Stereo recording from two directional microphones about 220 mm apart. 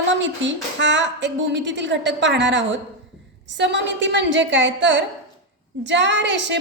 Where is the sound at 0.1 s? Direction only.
55° right (ahead or behind).